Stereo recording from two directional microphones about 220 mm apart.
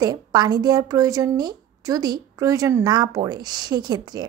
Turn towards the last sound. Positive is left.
turn(degrees=-20)  # may be behind; listen again after turning